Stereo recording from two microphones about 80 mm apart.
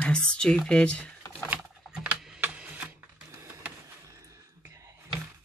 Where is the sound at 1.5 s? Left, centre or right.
Centre.